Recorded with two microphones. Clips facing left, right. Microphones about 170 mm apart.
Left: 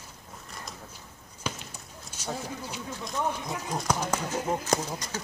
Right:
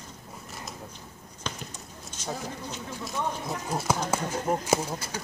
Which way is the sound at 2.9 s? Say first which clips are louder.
Left 1 dB; 5° right (ahead or behind).